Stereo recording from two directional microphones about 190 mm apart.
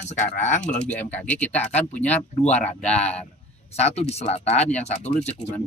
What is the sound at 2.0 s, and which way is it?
Speech, 35° left (ahead or behind).